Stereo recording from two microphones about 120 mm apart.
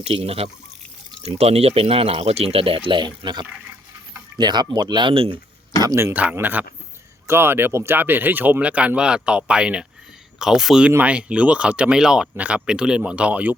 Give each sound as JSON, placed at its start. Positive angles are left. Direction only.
{"t": 0.0, "sound": "speech", "side_deg": -55}
{"t": 5.8, "sound": "speech", "side_deg": -25}
{"t": 6.3, "sound": "speech", "side_deg": -15}